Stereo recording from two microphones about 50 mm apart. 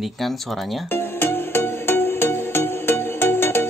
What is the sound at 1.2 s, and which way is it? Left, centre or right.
Music, left.